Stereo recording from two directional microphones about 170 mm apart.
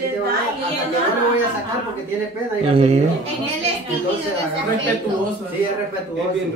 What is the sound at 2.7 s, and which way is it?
Speech, 35° right (ahead or behind).